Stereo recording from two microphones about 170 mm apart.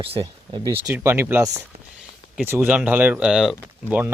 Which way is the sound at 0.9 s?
15° right (ahead or behind).